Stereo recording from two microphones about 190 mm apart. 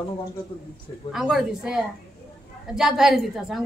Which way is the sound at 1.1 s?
5° right (ahead or behind).